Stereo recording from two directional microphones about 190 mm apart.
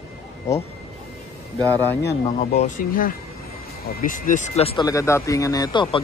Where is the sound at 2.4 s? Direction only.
35° left (ahead or behind).